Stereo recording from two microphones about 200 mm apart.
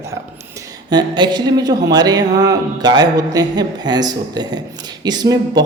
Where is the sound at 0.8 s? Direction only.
20° right (ahead or behind).